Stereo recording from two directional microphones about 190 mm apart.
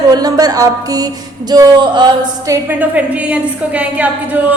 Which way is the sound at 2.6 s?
10° right (ahead or behind).